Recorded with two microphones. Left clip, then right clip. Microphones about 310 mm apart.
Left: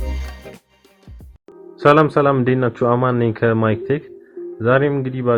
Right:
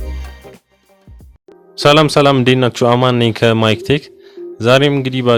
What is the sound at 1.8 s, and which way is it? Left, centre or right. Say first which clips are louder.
Speech: right 3 dB; right.